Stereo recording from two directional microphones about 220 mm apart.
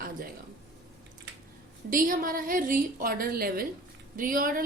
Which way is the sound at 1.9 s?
40° right (ahead or behind).